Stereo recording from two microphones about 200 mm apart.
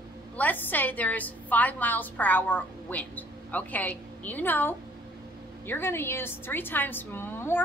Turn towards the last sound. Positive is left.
turn(degrees=10)  # may be behind; listen again after turning